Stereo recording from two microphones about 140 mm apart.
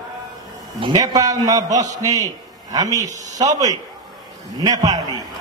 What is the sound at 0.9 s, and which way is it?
A man's voice, 25° right (ahead or behind).